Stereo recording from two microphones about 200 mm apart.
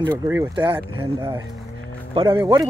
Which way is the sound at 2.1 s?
15° right (ahead or behind).